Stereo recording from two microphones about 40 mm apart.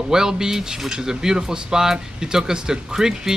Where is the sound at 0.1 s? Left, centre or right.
Centre.